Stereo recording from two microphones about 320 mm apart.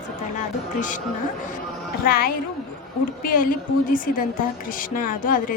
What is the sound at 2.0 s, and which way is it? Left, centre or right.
Speech, left.